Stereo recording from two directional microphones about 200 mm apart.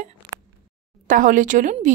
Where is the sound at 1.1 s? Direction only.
40° right (ahead or behind).